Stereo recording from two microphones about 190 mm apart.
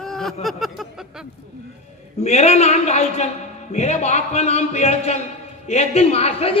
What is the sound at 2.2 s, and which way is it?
A woman's voice, 35° left (ahead or behind).